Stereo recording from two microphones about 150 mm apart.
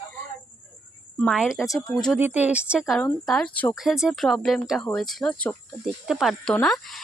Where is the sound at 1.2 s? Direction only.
5° right (ahead or behind).